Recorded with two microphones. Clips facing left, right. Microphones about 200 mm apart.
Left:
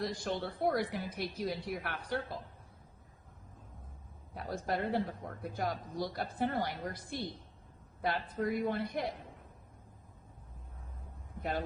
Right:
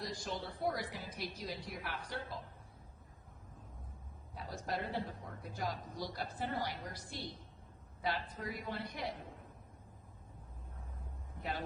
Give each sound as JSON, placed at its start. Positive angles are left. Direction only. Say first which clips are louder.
{"t": 0.0, "sound": "a woman's voice", "louder": "left 6 dB", "side_deg": 60}
{"t": 4.4, "sound": "a woman's voice", "louder": "left 6 dB", "side_deg": 60}